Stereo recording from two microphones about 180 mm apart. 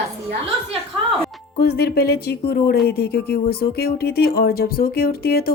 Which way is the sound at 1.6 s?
60° left (ahead or behind).